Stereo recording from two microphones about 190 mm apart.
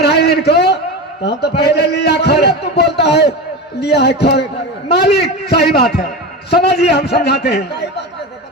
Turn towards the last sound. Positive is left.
turn(degrees=60)  # may be behind; listen again after turning